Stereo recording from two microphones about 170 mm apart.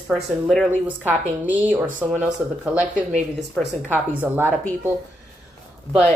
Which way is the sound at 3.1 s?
40° right (ahead or behind).